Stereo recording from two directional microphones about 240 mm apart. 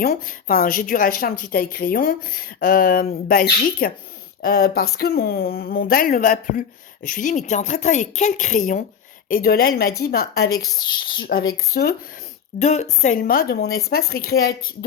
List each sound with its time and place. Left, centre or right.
0.0 s speech: left
10.8 s speech: centre
11.3 s speech: left
12.5 s speech: left